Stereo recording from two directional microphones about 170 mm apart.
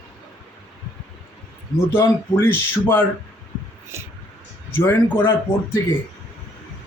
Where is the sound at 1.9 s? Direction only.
15° left (ahead or behind).